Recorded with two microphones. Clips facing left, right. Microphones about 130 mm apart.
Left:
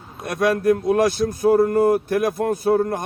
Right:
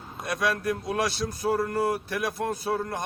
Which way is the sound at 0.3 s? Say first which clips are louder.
Left 9 dB; 50° left (ahead or behind).